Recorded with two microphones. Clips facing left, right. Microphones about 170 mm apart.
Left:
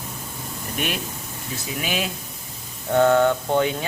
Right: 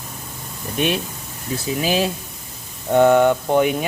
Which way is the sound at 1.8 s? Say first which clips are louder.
Right 7 dB; 30° right (ahead or behind).